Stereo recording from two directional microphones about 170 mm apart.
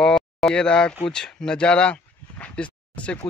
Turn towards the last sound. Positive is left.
turn(degrees=5)  # may be behind; listen again after turning